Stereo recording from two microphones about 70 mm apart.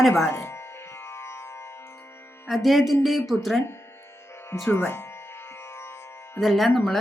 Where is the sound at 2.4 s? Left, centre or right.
Centre.